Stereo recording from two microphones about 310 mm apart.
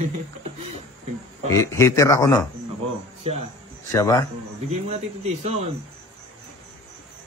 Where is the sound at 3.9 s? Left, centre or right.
Centre.